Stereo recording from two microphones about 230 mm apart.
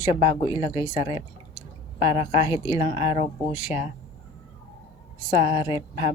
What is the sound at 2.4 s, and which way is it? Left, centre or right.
Speech, centre.